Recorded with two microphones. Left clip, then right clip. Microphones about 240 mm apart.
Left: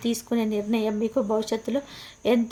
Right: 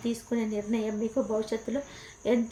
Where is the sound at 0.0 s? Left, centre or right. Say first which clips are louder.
Left 5 dB; left.